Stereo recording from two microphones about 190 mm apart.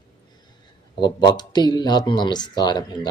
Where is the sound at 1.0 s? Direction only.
20° left (ahead or behind).